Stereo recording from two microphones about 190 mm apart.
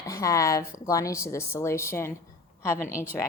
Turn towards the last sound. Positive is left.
turn(degrees=15)  # may be behind; listen again after turning